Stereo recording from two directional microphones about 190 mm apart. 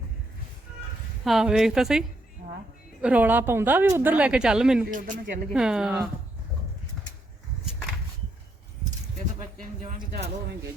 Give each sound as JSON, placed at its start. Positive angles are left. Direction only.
{"t": 1.2, "sound": "a woman's voice", "side_deg": 0}
{"t": 4.9, "sound": "speech", "side_deg": -45}
{"t": 5.5, "sound": "a woman's voice", "side_deg": -5}